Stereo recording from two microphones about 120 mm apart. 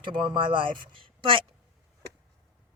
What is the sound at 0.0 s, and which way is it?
Speech, 45° right (ahead or behind).